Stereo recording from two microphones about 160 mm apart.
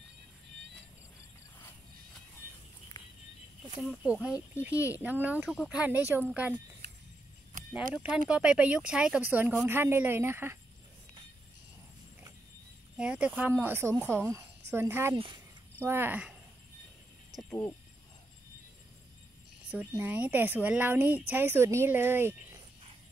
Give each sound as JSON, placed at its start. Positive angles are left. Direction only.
{"t": 3.8, "sound": "speech", "side_deg": -5}
{"t": 6.8, "sound": "a sound", "side_deg": -90}
{"t": 7.9, "sound": "speech", "side_deg": -5}
{"t": 12.9, "sound": "speech", "side_deg": -5}
{"t": 15.1, "sound": "speech", "side_deg": -30}
{"t": 15.8, "sound": "speech", "side_deg": -15}
{"t": 19.7, "sound": "speech", "side_deg": -10}